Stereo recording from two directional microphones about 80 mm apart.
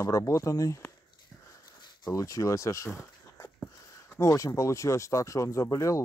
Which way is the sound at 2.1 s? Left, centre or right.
Left.